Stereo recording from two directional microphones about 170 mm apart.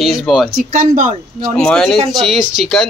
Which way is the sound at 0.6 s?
50° right (ahead or behind).